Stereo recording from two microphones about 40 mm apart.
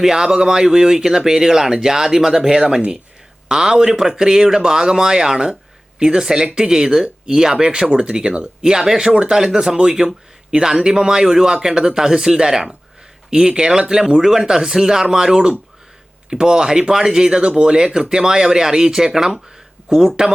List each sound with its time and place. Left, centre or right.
0.0 s speech: centre
7.5 s speech: right